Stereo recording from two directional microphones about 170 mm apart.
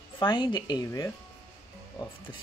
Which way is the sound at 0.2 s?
25° left (ahead or behind).